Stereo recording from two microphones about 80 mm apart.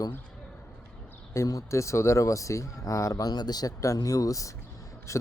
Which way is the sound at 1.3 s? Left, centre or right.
Left.